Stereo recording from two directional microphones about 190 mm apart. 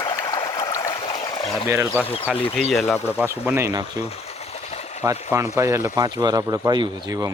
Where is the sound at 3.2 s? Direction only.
10° right (ahead or behind).